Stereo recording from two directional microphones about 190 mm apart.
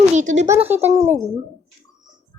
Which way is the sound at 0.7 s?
10° right (ahead or behind).